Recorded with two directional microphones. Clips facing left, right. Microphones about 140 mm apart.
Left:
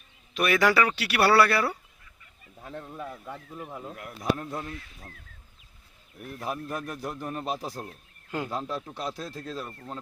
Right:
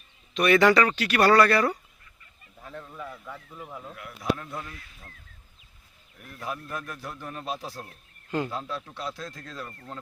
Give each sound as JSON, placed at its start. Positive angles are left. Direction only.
{"t": 0.3, "sound": "speech", "side_deg": 5}
{"t": 2.6, "sound": "a sound", "side_deg": 35}
{"t": 3.7, "sound": "speech", "side_deg": 20}
{"t": 3.9, "sound": "a man's voice", "side_deg": 40}
{"t": 6.4, "sound": "a man's voice", "side_deg": 35}
{"t": 7.6, "sound": "speech", "side_deg": 10}
{"t": 9.0, "sound": "a man's voice", "side_deg": 35}
{"t": 9.6, "sound": "speech", "side_deg": 10}